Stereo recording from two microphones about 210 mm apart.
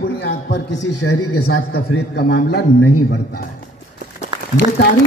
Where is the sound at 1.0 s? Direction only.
90° left.